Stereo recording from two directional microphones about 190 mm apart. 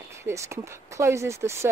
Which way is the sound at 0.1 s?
15° right (ahead or behind).